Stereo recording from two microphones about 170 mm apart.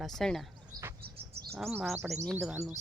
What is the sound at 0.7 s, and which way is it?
Bird, 20° right (ahead or behind).